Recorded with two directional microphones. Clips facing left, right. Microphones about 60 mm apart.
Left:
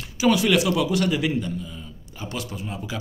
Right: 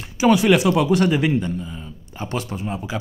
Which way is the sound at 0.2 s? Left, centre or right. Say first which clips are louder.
Right 4 dB; right.